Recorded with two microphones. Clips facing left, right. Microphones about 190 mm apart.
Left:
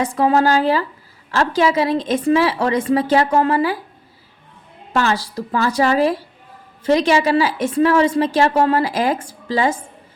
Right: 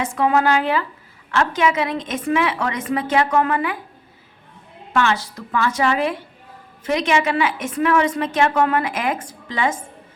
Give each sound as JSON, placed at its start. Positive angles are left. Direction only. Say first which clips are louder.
{"t": 0.0, "sound": "a woman's voice", "louder": "left 3 dB", "side_deg": 35}
{"t": 4.9, "sound": "a woman's voice", "louder": "left 1 dB", "side_deg": 35}